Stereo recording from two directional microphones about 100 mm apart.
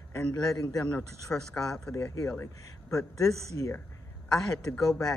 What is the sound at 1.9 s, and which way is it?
Speech, 35° left (ahead or behind).